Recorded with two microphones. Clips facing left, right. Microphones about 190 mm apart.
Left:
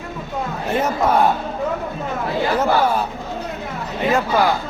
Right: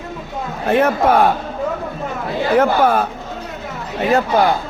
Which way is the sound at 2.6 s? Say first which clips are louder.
Right 6 dB; 55° right (ahead or behind).